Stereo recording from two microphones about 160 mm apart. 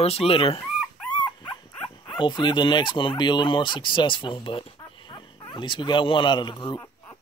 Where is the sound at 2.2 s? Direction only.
30° left (ahead or behind).